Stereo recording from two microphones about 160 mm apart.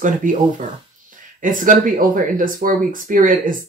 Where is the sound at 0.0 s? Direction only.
55° right (ahead or behind).